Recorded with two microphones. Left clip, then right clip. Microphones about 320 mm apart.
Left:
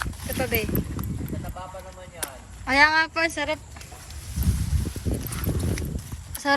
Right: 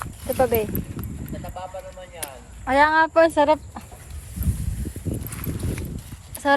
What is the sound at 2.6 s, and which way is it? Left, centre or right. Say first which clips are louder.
Speech: right 2 dB; centre.